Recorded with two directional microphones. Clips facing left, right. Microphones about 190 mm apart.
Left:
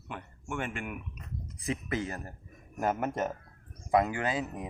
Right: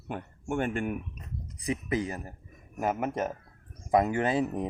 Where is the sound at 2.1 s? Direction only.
10° right (ahead or behind).